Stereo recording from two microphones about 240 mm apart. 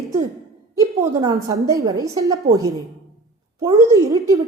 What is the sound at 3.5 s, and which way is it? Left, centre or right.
Speech, centre.